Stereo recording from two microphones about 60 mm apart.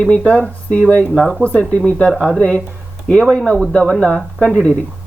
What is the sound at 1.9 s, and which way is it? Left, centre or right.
Speech, centre.